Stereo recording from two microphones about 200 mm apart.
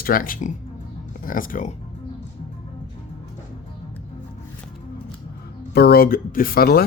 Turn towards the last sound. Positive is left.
turn(degrees=50)  # may be behind; listen again after turning